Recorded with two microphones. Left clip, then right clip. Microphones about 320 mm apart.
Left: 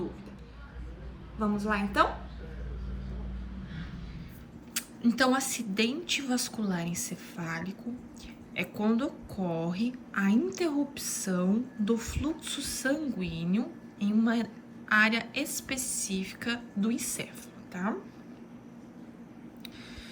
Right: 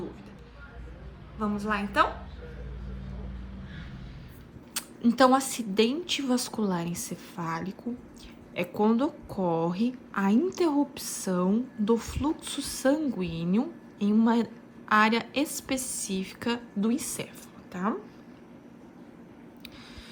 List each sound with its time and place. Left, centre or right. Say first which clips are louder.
1.4 s a woman's voice: right 1 dB; centre
4.7 s a woman's voice: right 2 dB; centre